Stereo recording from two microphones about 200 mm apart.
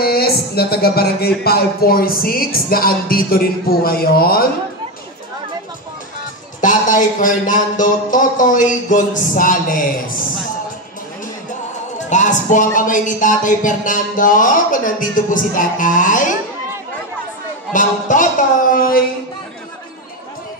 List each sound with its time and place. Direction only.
0.0 s music: 50° left (ahead or behind)
6.6 s speech: 40° left (ahead or behind)
12.0 s speech: 40° left (ahead or behind)
17.7 s music: 40° left (ahead or behind)